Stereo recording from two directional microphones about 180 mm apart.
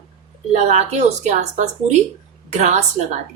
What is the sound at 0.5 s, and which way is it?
Speech, 40° right (ahead or behind).